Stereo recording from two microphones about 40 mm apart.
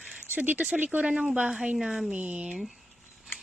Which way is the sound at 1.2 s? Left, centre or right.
Centre.